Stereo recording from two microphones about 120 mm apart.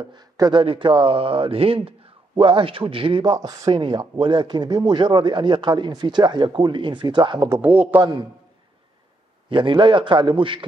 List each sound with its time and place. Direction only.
0.0 s speech: 35° right (ahead or behind)
7.4 s speech: 25° right (ahead or behind)
7.7 s a man's voice: 10° right (ahead or behind)
9.5 s a man's voice: 45° right (ahead or behind)